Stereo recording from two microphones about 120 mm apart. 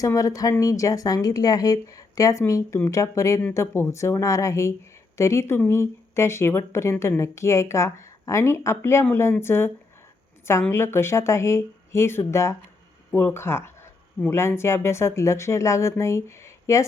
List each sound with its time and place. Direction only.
0.0 s speech: 30° left (ahead or behind)